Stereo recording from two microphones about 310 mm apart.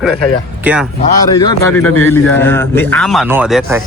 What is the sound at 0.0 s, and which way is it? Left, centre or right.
Speech, centre.